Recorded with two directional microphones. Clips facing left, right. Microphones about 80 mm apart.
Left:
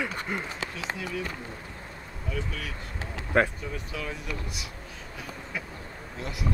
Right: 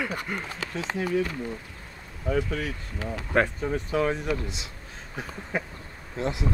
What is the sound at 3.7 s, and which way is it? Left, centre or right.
Speech, right.